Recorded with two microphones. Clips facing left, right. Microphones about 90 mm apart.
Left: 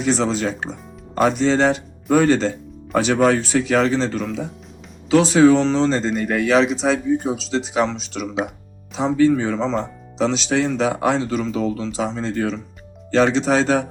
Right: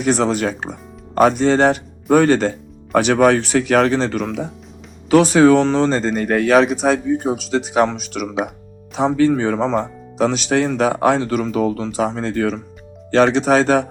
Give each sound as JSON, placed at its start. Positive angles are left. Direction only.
{"t": 0.0, "sound": "speech", "side_deg": -55}